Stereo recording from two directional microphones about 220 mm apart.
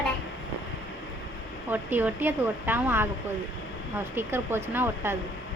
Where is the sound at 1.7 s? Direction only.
10° right (ahead or behind).